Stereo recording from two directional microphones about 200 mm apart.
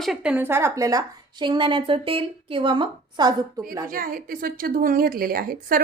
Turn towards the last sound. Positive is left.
turn(degrees=-50)  # may be behind; listen again after turning